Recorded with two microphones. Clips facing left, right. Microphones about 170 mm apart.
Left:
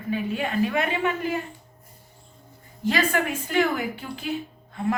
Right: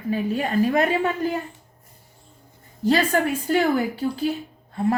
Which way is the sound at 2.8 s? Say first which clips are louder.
Right 4 dB; 40° right (ahead or behind).